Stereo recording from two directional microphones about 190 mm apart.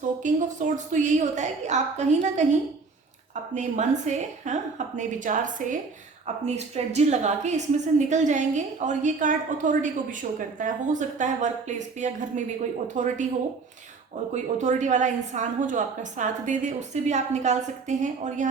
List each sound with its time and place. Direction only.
0.2 s a woman's voice: 40° right (ahead or behind)
14.3 s a woman's voice: 40° right (ahead or behind)